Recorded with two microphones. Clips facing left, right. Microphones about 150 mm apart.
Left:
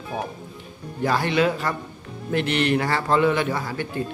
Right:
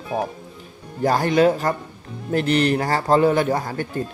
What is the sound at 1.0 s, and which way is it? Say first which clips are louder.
Speech: right 4 dB; 40° right (ahead or behind).